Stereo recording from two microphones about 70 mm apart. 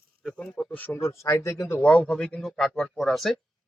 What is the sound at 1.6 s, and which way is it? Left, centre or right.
Speech, left.